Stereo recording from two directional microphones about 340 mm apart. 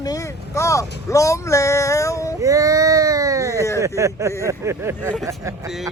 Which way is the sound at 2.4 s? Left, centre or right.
Centre.